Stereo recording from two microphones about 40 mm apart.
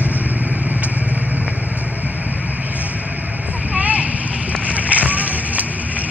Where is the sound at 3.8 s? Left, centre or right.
Right.